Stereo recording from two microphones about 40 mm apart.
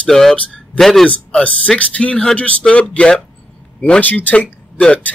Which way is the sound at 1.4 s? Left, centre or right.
Left.